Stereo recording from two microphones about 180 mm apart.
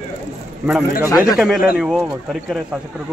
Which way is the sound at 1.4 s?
5° right (ahead or behind).